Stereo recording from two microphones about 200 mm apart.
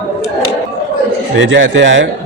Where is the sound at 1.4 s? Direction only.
70° right (ahead or behind).